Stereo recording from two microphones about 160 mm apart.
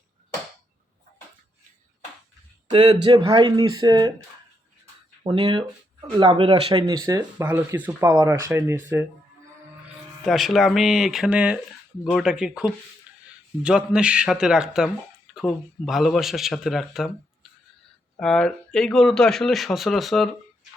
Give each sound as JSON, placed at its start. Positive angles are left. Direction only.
{"t": 2.6, "sound": "speech", "side_deg": -30}
{"t": 5.2, "sound": "speech", "side_deg": -30}
{"t": 10.2, "sound": "speech", "side_deg": 0}
{"t": 18.2, "sound": "speech", "side_deg": 5}